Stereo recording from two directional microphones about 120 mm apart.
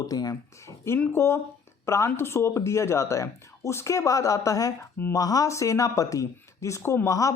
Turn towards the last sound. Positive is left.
turn(degrees=25)  # may be behind; listen again after turning